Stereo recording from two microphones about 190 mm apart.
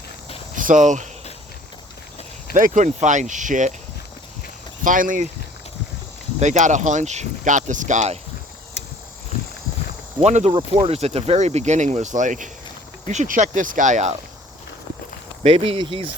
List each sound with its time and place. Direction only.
0.5 s speech: 45° right (ahead or behind)
2.5 s speech: 45° right (ahead or behind)
4.8 s speech: 45° right (ahead or behind)
6.4 s speech: 40° right (ahead or behind)
10.2 s speech: 35° right (ahead or behind)
15.4 s speech: 30° right (ahead or behind)